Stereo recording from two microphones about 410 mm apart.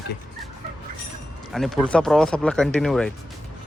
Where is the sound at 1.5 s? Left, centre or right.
Centre.